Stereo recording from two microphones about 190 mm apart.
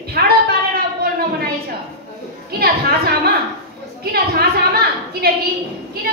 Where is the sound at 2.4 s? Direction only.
55° right (ahead or behind).